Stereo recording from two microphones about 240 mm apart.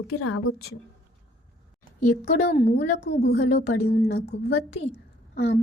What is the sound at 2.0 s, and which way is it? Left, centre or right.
A woman's voice, left.